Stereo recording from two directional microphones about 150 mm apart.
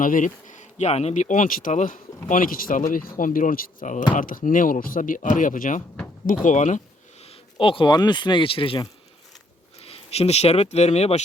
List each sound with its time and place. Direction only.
0.0 s speech: 60° left (ahead or behind)